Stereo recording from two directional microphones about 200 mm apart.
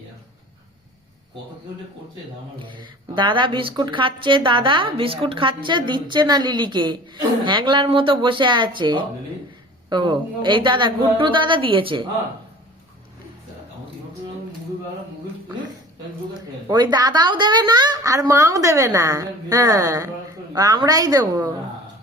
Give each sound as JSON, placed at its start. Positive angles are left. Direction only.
{"t": 2.6, "sound": "a woman's voice", "side_deg": -25}
{"t": 16.6, "sound": "a woman's voice", "side_deg": -20}